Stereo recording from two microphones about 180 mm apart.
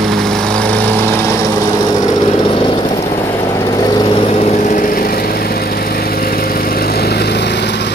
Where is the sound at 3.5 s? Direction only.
20° left (ahead or behind).